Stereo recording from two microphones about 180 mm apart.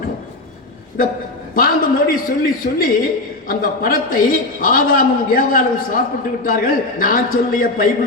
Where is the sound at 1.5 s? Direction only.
50° left (ahead or behind).